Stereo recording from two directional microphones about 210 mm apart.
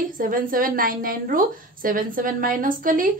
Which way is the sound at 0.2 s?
40° right (ahead or behind).